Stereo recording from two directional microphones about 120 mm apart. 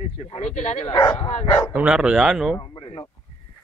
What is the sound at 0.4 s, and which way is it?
Speech, 65° left (ahead or behind).